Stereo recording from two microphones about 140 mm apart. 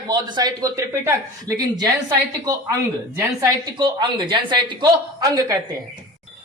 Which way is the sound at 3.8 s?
35° right (ahead or behind).